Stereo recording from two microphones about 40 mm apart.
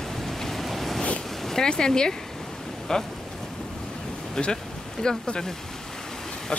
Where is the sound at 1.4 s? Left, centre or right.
Centre.